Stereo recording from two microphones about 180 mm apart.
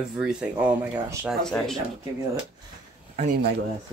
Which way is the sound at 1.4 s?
5° left (ahead or behind).